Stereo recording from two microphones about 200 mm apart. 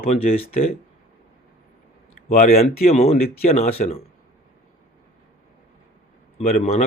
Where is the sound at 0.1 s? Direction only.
30° left (ahead or behind).